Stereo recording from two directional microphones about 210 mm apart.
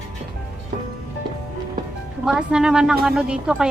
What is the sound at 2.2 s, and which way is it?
Speech, 5° right (ahead or behind).